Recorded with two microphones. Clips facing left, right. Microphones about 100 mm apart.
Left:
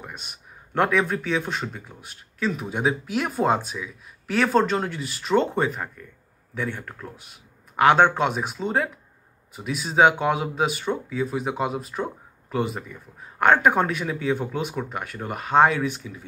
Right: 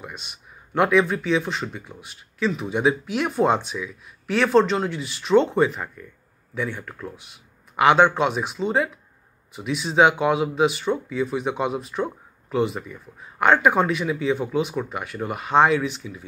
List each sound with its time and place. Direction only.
0.1 s speech: 45° left (ahead or behind)
13.4 s speech: 45° left (ahead or behind)